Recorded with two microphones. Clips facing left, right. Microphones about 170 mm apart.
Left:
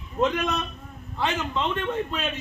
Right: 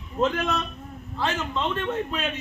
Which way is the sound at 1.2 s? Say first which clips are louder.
Left 1 dB; centre (ahead or behind).